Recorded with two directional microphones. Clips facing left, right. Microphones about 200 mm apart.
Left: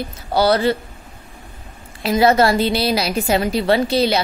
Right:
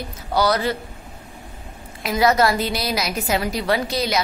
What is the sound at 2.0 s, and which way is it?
A woman's voice, 30° left (ahead or behind).